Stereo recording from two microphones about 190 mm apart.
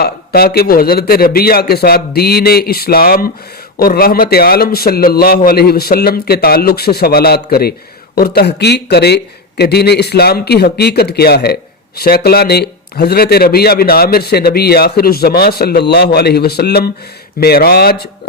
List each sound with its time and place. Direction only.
0.0 s a man's voice: 55° left (ahead or behind)